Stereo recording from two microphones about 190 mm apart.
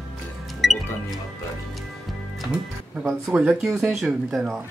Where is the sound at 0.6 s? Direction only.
Centre (ahead or behind).